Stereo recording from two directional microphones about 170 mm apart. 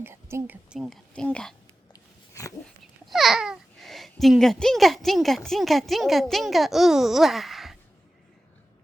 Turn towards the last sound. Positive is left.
turn(degrees=0)  # may be behind; listen again after turning